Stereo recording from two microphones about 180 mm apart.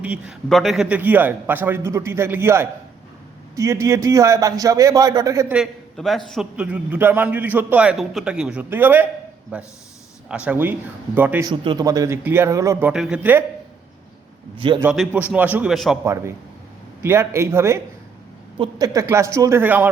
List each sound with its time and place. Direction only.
0.0 s a man's voice: 5° right (ahead or behind)
5.5 s a man's voice: centre (ahead or behind)
11.4 s a man's voice: 25° right (ahead or behind)
12.9 s a man's voice: 5° right (ahead or behind)
14.9 s a man's voice: 5° right (ahead or behind)
17.0 s a man's voice: 15° right (ahead or behind)